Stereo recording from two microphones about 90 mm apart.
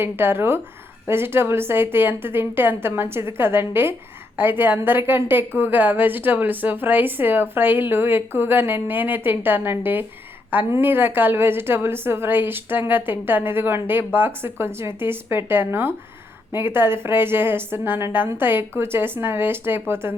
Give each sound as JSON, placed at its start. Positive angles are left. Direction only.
{"t": 0.0, "sound": "a woman's voice", "side_deg": -25}